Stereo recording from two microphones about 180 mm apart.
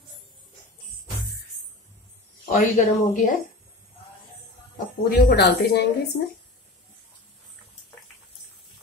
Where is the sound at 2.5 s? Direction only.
50° left (ahead or behind).